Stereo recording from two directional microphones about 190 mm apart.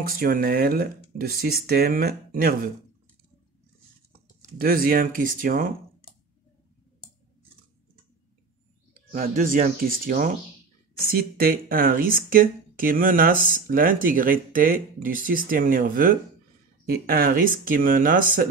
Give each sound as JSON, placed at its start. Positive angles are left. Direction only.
{"t": 0.0, "sound": "speech", "side_deg": -50}
{"t": 4.6, "sound": "speech", "side_deg": -50}
{"t": 9.1, "sound": "speech", "side_deg": -45}